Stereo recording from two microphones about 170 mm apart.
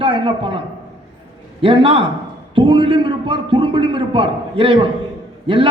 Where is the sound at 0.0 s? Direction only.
30° right (ahead or behind).